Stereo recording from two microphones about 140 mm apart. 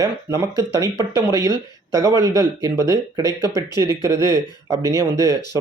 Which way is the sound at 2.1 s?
30° left (ahead or behind).